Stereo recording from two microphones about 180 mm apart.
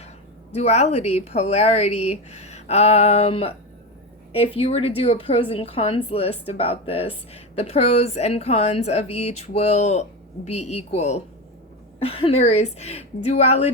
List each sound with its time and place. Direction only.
0.5 s a woman's voice: 35° left (ahead or behind)